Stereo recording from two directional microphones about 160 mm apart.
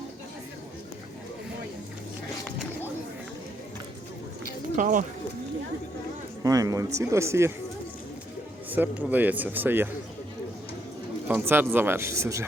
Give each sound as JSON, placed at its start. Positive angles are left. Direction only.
{"t": 4.8, "sound": "speech", "side_deg": -55}
{"t": 6.4, "sound": "speech", "side_deg": -20}
{"t": 8.7, "sound": "speech", "side_deg": -10}
{"t": 11.3, "sound": "speech", "side_deg": -15}